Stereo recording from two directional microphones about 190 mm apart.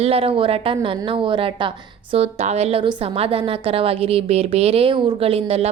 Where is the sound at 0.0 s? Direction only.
30° right (ahead or behind).